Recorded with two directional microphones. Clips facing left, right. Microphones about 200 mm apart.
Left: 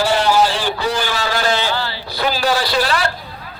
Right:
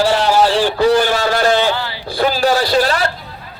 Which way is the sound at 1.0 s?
50° right (ahead or behind).